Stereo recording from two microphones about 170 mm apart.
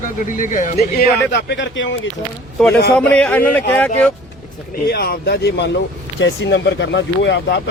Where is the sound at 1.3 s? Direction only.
85° left.